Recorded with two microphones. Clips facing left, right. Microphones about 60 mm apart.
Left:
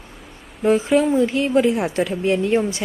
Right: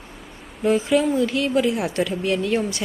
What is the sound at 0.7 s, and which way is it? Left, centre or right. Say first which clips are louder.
Speech: left 2 dB; centre.